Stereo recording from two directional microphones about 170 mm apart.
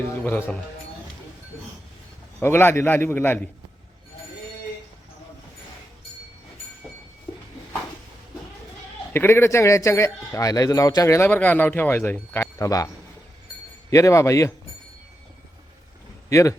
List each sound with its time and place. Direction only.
0.2 s speech: 10° left (ahead or behind)
2.4 s speech: 15° left (ahead or behind)
9.1 s speech: 15° left (ahead or behind)
13.9 s speech: 20° left (ahead or behind)
16.3 s speech: 15° left (ahead or behind)